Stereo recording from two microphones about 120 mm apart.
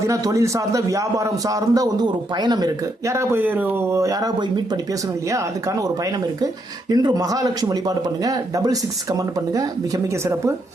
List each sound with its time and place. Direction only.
0.0 s a man's voice: 25° right (ahead or behind)
3.1 s a man's voice: 20° right (ahead or behind)
6.9 s speech: 35° right (ahead or behind)